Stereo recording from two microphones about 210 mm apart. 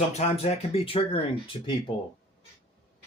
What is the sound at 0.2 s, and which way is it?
Speech, 30° left (ahead or behind).